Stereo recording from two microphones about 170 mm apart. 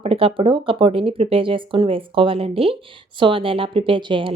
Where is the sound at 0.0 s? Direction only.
35° right (ahead or behind).